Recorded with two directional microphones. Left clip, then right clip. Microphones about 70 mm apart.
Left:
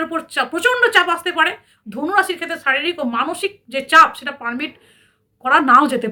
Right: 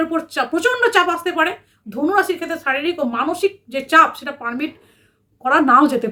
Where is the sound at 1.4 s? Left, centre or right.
Right.